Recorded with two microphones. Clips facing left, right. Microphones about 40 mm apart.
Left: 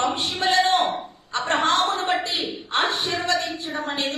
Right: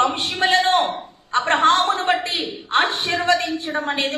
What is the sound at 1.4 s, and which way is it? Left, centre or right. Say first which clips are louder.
A woman's voice: right 4 dB; right.